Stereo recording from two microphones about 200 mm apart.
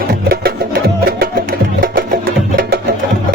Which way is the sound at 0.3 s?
50° right (ahead or behind).